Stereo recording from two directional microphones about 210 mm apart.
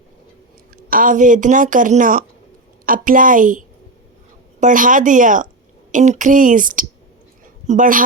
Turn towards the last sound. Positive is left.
turn(degrees=-40)  # may be behind; listen again after turning